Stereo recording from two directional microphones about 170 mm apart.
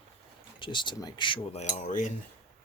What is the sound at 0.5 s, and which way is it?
Speech, 30° left (ahead or behind).